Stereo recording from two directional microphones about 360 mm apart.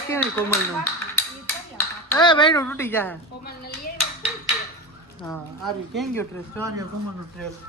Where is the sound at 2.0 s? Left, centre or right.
Centre.